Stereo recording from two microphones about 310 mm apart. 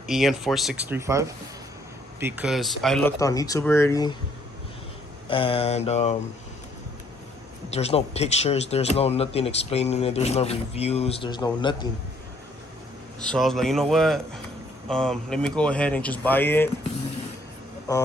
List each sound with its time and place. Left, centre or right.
0.1 s speech: centre
5.3 s speech: centre
7.7 s speech: centre
13.1 s speech: centre